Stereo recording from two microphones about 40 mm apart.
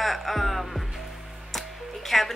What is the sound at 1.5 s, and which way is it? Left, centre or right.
Music, centre.